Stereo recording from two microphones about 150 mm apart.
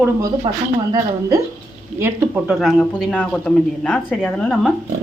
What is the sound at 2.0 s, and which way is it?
A man's voice, 10° right (ahead or behind).